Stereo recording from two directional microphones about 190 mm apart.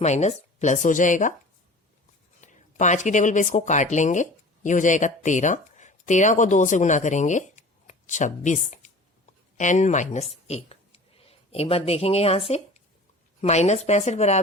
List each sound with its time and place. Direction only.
0.0 s speech: 35° left (ahead or behind)
2.4 s speech: 40° left (ahead or behind)